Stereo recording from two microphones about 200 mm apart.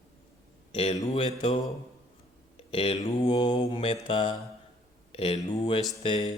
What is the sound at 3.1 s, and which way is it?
Mantra, 25° left (ahead or behind).